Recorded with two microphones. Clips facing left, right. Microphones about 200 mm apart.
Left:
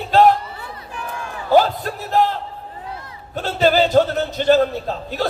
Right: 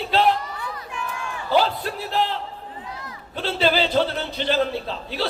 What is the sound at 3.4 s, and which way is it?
A man's voice, 45° left (ahead or behind).